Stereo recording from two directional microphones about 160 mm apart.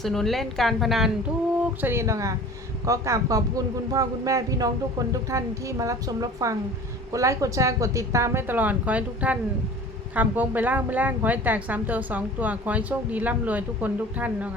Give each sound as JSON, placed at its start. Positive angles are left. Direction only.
{"t": 0.0, "sound": "a woman's voice", "side_deg": 0}
{"t": 1.6, "sound": "a woman's voice", "side_deg": -15}